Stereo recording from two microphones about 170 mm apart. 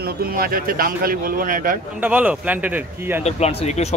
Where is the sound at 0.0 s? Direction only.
60° right (ahead or behind).